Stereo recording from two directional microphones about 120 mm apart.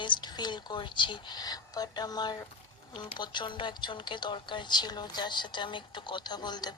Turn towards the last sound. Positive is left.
turn(degrees=35)  # may be behind; listen again after turning